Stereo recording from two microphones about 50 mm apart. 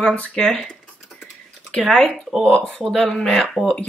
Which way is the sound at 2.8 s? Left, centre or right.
Centre.